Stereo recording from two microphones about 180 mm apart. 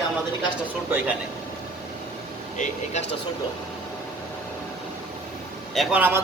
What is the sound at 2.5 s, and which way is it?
Speech, 45° left (ahead or behind).